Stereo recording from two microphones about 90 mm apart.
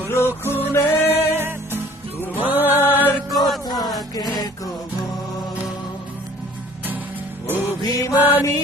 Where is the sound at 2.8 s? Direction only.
20° left (ahead or behind).